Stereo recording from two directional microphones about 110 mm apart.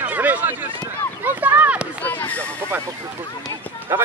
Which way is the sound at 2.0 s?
15° left (ahead or behind).